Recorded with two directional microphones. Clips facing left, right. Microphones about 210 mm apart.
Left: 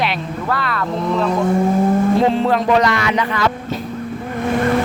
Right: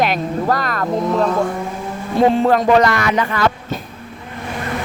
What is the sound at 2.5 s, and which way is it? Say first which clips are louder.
Speech: right 2 dB; 45° right (ahead or behind).